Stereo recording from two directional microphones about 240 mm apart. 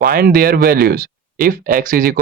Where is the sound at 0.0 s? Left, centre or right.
Right.